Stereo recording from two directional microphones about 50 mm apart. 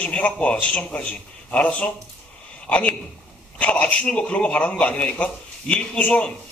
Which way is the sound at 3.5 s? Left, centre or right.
Left.